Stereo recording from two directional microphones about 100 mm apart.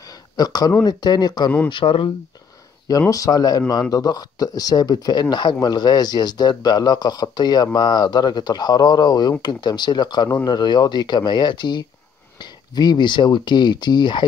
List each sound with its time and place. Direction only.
0.0 s a sound: 40° left (ahead or behind)
0.8 s speech: 45° left (ahead or behind)
1.7 s speech: 60° left (ahead or behind)
3.1 s speech: 35° left (ahead or behind)